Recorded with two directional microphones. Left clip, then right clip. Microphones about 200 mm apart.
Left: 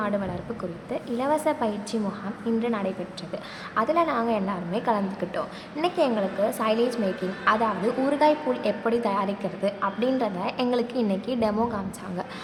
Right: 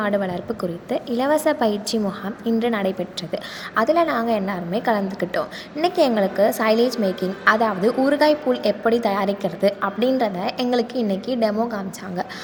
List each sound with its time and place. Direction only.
0.0 s a woman's voice: 20° right (ahead or behind)